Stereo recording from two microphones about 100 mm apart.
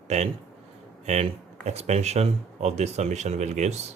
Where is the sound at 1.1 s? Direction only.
90° right.